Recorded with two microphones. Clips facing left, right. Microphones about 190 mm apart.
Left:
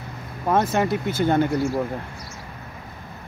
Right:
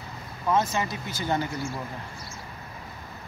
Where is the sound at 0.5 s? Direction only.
55° left (ahead or behind).